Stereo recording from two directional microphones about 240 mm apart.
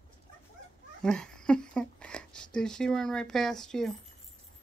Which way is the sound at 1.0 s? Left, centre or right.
Centre.